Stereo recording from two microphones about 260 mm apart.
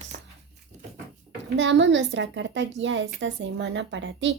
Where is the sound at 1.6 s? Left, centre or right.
Right.